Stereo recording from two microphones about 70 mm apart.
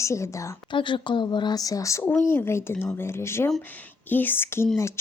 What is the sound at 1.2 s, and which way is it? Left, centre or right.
Speech, left.